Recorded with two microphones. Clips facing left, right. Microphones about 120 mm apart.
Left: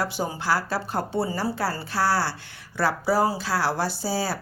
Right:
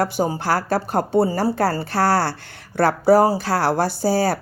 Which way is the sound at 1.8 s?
55° right (ahead or behind).